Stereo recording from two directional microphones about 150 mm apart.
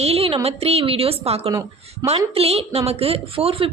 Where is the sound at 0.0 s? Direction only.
40° right (ahead or behind).